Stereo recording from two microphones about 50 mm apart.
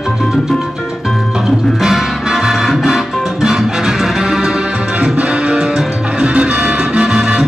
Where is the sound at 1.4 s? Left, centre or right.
Centre.